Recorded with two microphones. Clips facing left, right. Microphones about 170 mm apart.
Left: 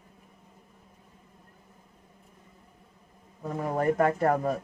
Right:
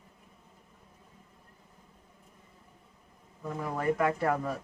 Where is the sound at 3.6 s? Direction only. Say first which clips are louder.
Left 4 dB; 45° left (ahead or behind).